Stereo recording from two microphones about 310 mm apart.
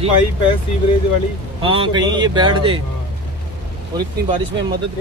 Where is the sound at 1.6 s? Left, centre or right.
Centre.